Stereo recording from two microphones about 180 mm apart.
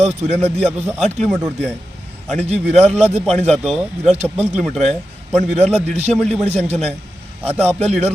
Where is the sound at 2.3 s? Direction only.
35° right (ahead or behind).